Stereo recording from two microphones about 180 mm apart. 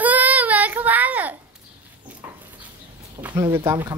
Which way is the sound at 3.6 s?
15° right (ahead or behind).